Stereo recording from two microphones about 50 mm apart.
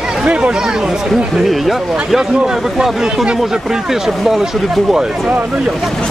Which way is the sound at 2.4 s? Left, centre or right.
Centre.